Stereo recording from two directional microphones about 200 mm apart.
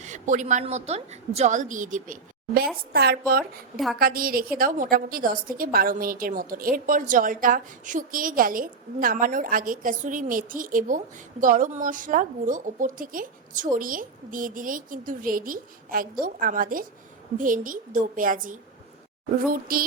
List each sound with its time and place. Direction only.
0.0 s a woman's voice: 35° right (ahead or behind)
2.9 s a woman's voice: 50° right (ahead or behind)
19.7 s a woman's voice: 45° right (ahead or behind)